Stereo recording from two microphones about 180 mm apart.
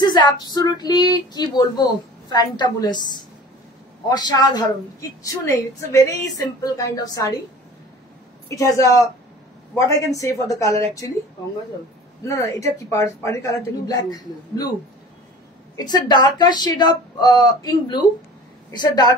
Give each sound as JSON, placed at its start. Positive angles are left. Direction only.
{"t": 0.0, "sound": "a man's voice", "side_deg": 25}
{"t": 8.5, "sound": "a man's voice", "side_deg": 15}
{"t": 12.3, "sound": "a man's voice", "side_deg": 15}
{"t": 15.7, "sound": "speech", "side_deg": 25}